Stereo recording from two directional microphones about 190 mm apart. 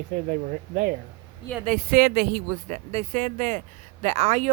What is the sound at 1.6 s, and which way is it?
Speech, 50° right (ahead or behind).